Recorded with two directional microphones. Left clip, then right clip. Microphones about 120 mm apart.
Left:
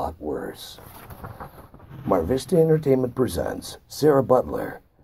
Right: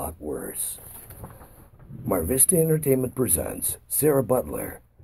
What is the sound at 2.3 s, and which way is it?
Speech, 20° right (ahead or behind).